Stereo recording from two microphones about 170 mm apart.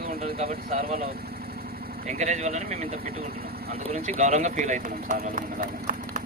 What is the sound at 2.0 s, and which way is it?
Speech, 45° right (ahead or behind).